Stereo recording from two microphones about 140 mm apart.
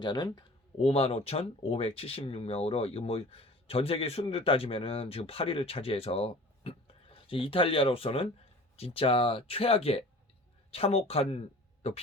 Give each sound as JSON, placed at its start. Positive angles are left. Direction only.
{"t": 0.0, "sound": "speech", "side_deg": 30}
{"t": 0.8, "sound": "speech", "side_deg": 45}